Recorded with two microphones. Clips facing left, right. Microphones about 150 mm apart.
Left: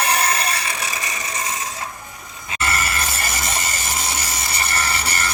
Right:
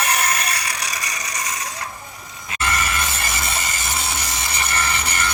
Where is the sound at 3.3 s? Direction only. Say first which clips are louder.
Left 1 dB; 40° left (ahead or behind).